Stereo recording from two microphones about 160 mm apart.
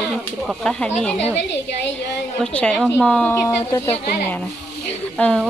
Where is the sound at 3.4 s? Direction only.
20° left (ahead or behind).